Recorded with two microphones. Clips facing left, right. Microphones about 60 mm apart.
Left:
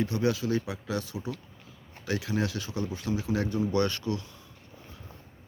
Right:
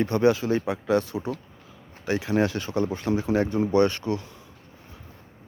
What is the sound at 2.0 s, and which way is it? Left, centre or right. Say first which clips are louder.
Speech: right 6 dB; right.